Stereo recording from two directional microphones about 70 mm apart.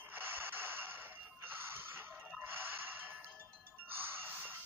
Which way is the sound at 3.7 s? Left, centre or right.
Right.